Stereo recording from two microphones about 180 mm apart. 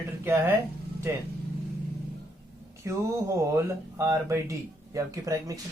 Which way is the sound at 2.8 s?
15° right (ahead or behind).